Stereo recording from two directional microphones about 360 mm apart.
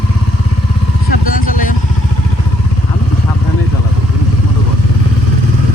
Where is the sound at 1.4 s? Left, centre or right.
Left.